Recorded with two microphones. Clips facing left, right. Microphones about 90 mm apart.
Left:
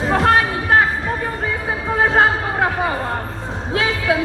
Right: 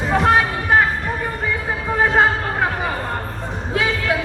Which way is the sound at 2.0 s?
25° left (ahead or behind).